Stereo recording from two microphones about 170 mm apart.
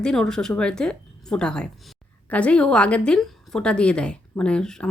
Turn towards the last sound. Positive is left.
turn(degrees=5)  # may be behind; listen again after turning